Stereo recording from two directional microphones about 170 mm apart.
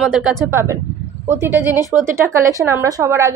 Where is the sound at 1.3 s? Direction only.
15° right (ahead or behind).